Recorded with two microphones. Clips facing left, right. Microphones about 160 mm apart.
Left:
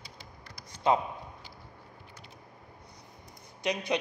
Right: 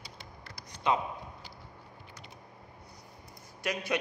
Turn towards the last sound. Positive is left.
turn(degrees=20)  # may be behind; listen again after turning